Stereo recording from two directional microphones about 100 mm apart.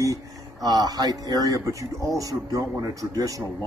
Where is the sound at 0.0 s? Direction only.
35° right (ahead or behind).